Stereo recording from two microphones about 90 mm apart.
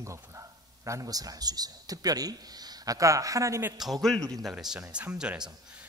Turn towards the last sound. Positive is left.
turn(degrees=-10)  # may be behind; listen again after turning